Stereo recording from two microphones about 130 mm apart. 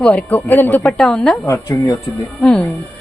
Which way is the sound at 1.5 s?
20° left (ahead or behind).